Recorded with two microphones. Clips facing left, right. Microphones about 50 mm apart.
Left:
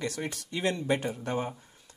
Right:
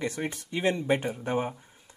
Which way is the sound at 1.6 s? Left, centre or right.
Centre.